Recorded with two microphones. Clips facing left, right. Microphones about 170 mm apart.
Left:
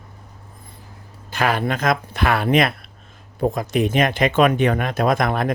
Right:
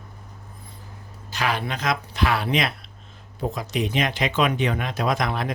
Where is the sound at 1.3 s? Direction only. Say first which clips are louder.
Left 5 dB; 50° left (ahead or behind).